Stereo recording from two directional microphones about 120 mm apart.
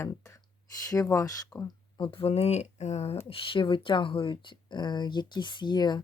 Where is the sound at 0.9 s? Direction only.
25° left (ahead or behind).